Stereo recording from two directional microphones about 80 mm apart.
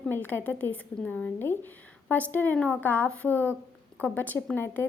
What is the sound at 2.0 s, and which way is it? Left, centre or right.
A woman's voice, centre.